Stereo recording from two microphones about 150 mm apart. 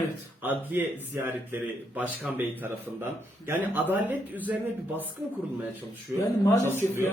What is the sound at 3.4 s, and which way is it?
Speech, 15° right (ahead or behind).